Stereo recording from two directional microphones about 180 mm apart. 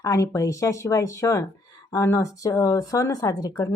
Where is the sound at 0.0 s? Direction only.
20° left (ahead or behind).